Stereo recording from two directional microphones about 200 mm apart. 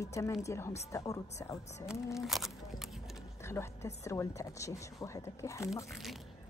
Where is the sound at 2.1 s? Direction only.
Centre (ahead or behind).